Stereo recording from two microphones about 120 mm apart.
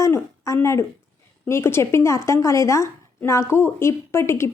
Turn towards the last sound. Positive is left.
turn(degrees=20)  # may be behind; listen again after turning